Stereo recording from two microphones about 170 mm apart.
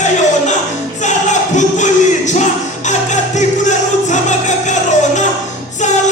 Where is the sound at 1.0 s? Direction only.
45° left (ahead or behind).